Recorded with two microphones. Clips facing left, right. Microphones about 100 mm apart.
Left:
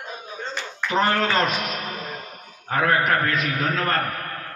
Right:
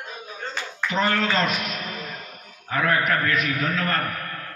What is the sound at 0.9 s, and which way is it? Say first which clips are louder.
A man's voice: left 2 dB; 35° left (ahead or behind).